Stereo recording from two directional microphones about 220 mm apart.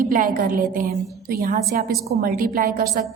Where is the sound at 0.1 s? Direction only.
40° right (ahead or behind).